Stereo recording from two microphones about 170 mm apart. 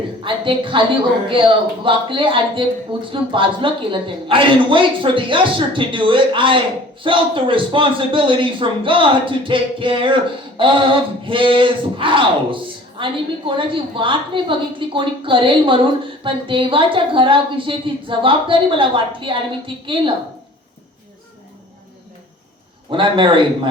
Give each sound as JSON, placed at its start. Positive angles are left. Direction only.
{"t": 0.3, "sound": "a woman's voice", "side_deg": -30}
{"t": 22.9, "sound": "a woman's voice", "side_deg": -30}